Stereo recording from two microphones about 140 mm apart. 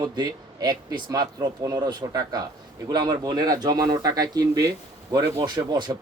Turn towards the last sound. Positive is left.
turn(degrees=-30)  # may be behind; listen again after turning